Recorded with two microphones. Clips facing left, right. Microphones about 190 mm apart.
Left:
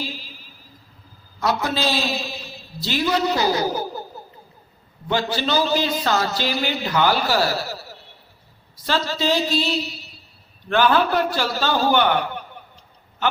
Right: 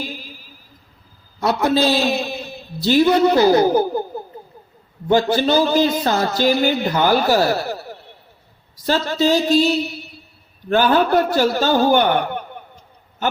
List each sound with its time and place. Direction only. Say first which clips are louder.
0.0 s music: right 2 dB; 50° right (ahead or behind)
1.6 s a man's voice: right 7 dB; 55° right (ahead or behind)
5.0 s a man's voice: right 7 dB; 50° right (ahead or behind)
10.7 s a man's voice: right 3 dB; 40° right (ahead or behind)